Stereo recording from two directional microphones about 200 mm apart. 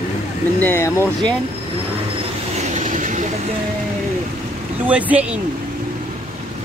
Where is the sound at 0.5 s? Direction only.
10° left (ahead or behind).